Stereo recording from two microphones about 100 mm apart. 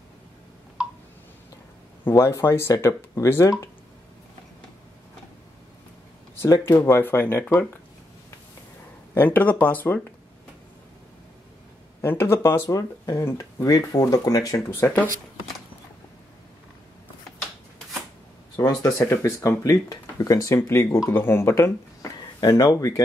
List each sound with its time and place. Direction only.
2.1 s speech: 25° left (ahead or behind)
6.3 s speech: 25° left (ahead or behind)
9.1 s speech: 20° left (ahead or behind)
12.0 s speech: 25° left (ahead or behind)
12.6 s speech: 35° left (ahead or behind)
14.8 s speech: 25° left (ahead or behind)
18.6 s speech: 35° left (ahead or behind)
22.4 s speech: 40° left (ahead or behind)